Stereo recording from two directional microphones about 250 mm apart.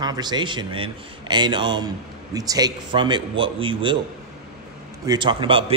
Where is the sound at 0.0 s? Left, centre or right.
Centre.